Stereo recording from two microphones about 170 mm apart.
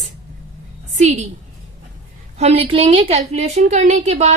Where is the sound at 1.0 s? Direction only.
40° right (ahead or behind).